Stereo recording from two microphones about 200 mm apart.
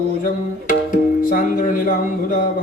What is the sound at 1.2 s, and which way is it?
Music, 45° left (ahead or behind).